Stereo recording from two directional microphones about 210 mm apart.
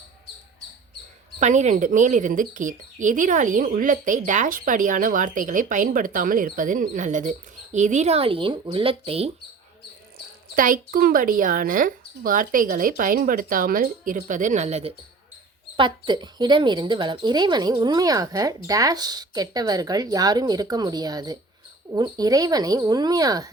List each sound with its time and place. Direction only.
1.4 s speech: 35° right (ahead or behind)
10.5 s speech: 40° right (ahead or behind); by 23.5 s 15° right (ahead or behind)